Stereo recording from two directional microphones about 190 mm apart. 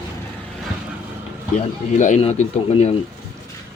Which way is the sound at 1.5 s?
40° left (ahead or behind).